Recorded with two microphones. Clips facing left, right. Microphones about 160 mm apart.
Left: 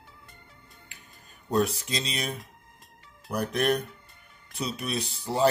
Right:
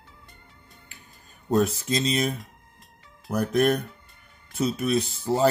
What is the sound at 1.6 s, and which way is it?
Speech, 45° right (ahead or behind).